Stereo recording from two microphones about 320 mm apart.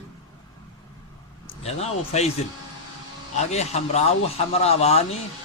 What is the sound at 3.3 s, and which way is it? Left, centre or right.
Speech, left.